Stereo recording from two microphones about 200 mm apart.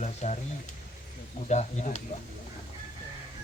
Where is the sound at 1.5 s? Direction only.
35° left (ahead or behind).